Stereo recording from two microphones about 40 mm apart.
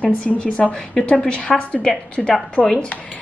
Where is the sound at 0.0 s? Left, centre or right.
Left.